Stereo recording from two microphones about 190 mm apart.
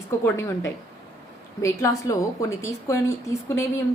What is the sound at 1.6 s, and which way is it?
A woman's voice, 15° left (ahead or behind).